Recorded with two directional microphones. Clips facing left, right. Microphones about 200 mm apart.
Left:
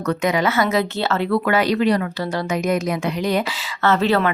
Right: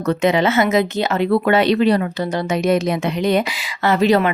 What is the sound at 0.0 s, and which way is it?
Speech, 25° right (ahead or behind).